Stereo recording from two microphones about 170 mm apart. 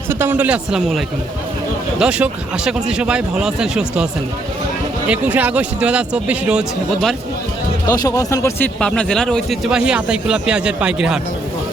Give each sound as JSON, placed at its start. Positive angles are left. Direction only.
{"t": 0.1, "sound": "speech", "side_deg": -10}
{"t": 7.9, "sound": "speech", "side_deg": 20}